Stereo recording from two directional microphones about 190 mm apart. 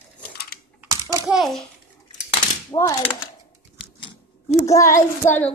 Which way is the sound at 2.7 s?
25° left (ahead or behind).